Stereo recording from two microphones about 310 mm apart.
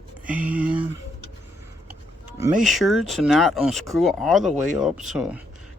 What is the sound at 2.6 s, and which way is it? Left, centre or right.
Speech, centre.